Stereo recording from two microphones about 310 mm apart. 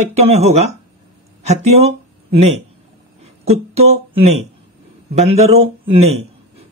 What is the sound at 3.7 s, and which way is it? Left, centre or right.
Speech, centre.